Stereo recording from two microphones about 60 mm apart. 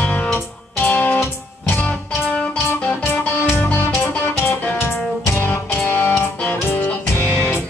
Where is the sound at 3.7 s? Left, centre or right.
Left.